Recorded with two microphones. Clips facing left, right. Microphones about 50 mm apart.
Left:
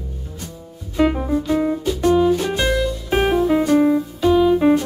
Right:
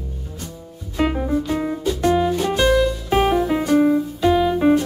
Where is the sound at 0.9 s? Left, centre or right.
Centre.